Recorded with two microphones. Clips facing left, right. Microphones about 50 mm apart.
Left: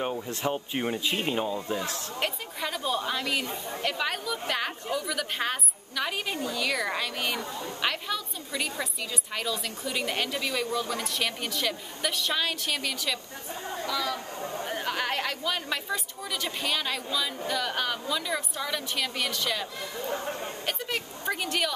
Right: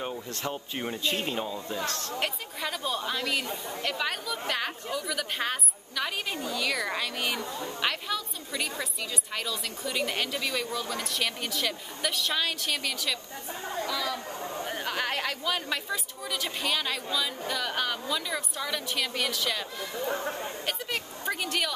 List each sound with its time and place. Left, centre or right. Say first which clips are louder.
0.0 s speech: left 4 dB; centre
2.0 s a woman's voice: even; centre
20.6 s a sound: left 2 dB; centre